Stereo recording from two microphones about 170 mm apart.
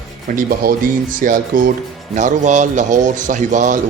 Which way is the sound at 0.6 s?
60° right (ahead or behind).